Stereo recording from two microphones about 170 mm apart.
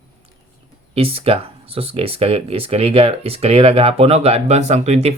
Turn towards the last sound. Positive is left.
turn(degrees=-40)  # may be behind; listen again after turning